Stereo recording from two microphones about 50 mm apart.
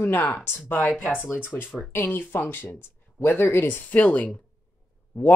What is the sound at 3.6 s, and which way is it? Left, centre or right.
Speech, left.